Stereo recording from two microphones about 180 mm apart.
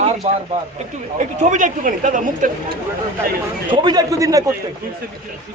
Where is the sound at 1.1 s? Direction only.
45° right (ahead or behind).